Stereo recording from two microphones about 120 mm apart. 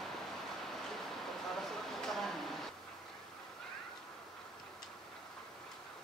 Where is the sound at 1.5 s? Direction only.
Centre (ahead or behind).